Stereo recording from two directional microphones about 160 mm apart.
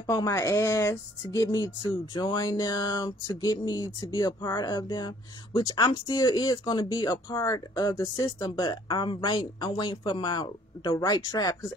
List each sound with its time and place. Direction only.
0.0 s speech: 20° left (ahead or behind)